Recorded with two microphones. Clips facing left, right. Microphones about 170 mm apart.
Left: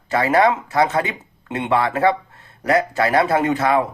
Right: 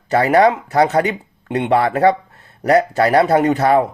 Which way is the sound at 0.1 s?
35° right (ahead or behind).